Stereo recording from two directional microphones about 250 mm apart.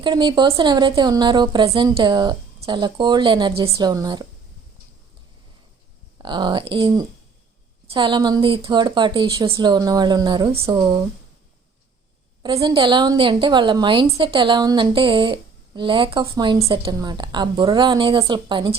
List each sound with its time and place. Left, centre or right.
0.0 s a woman's voice: centre
6.1 s a woman's voice: centre
12.4 s a woman's voice: centre